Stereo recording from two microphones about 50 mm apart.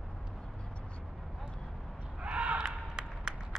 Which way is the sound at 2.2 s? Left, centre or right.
Right.